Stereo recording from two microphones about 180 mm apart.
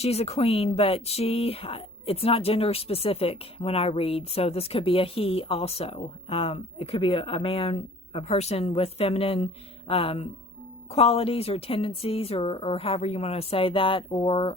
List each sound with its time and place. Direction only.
0.0 s speech: 35° left (ahead or behind)